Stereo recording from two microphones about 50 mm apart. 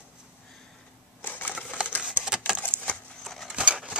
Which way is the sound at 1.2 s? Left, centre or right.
Left.